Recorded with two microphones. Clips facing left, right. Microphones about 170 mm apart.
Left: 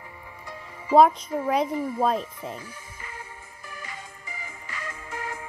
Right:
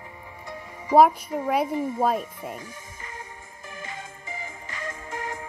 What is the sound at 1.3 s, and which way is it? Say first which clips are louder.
Speech: even; 15° right (ahead or behind).